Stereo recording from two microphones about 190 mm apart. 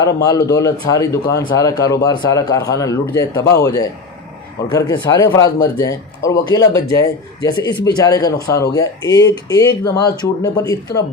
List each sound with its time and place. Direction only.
0.0 s a man's voice: 15° left (ahead or behind)